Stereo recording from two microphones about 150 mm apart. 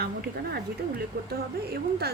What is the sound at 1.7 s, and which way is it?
Speech, 90° right.